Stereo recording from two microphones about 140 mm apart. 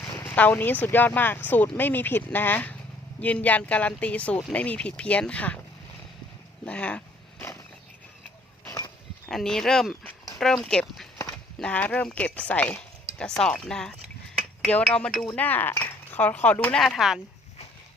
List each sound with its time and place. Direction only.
0.2 s speech: 10° left (ahead or behind)
6.7 s speech: 10° left (ahead or behind)
8.6 s a sound: 20° left (ahead or behind)
9.3 s speech: 5° left (ahead or behind)
14.9 s speech: 5° left (ahead or behind)
16.8 s speech: centre (ahead or behind)